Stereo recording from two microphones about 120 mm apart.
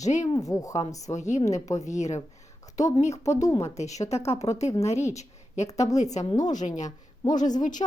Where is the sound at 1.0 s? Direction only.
75° left (ahead or behind).